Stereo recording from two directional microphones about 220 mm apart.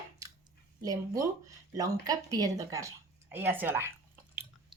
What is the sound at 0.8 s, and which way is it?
Speech, 15° right (ahead or behind).